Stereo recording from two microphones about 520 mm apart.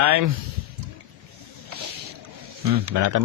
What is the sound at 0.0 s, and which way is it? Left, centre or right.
Speech, right.